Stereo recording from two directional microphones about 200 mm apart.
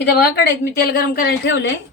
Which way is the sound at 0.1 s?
50° left (ahead or behind).